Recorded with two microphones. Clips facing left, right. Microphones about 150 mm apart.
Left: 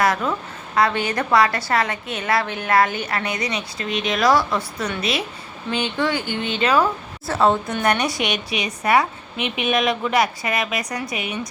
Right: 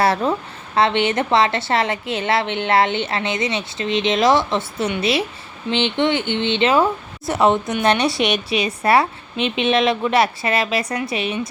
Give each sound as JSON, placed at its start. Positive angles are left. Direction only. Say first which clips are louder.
{"t": 0.0, "sound": "a woman's voice", "louder": "right 3 dB", "side_deg": -30}